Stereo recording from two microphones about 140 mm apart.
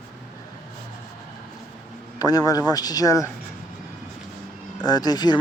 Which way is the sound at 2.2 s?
25° left (ahead or behind).